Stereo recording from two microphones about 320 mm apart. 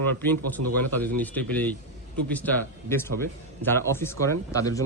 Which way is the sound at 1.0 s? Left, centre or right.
Centre.